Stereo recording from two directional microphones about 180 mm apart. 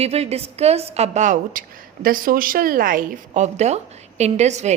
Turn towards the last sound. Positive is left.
turn(degrees=-40)  # may be behind; listen again after turning